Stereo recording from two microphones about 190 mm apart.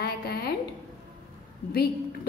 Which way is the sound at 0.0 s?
55° left (ahead or behind).